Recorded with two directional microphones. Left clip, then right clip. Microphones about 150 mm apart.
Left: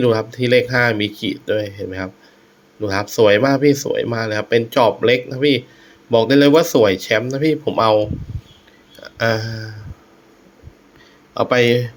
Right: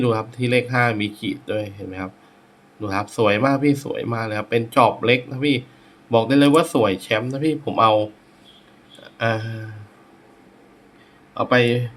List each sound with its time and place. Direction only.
0.0 s speech: 25° left (ahead or behind)
9.0 s speech: 30° left (ahead or behind)
11.3 s speech: 35° left (ahead or behind)